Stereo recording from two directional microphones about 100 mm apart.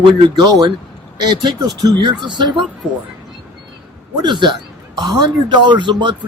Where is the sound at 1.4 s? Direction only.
50° right (ahead or behind).